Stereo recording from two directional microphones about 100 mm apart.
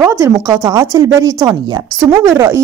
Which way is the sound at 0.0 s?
30° right (ahead or behind).